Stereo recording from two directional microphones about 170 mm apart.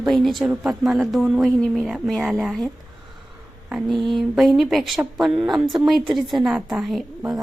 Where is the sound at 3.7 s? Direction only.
Centre (ahead or behind).